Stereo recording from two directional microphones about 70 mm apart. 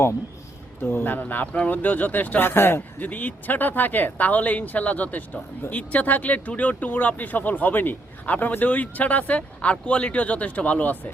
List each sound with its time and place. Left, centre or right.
0.8 s speech: left